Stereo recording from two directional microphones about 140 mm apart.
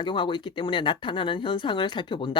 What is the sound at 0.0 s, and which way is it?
Speech, 35° left (ahead or behind).